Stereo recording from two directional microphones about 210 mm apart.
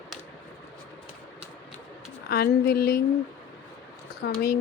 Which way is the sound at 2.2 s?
50° left (ahead or behind).